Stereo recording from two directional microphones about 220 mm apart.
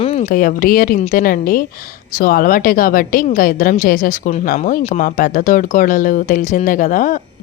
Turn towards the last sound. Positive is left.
turn(degrees=35)  # may be behind; listen again after turning